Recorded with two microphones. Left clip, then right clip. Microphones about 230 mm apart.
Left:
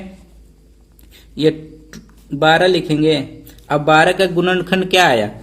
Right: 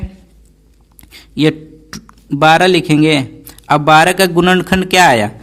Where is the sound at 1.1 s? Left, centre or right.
Right.